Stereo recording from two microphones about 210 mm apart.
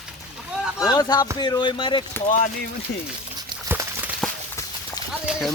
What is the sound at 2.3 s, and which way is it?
Speech, 40° left (ahead or behind).